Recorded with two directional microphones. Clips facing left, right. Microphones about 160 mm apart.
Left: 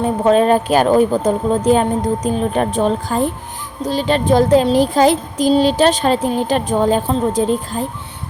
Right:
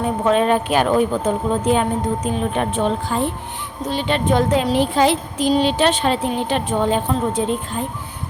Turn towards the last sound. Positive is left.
turn(degrees=35)  # may be behind; listen again after turning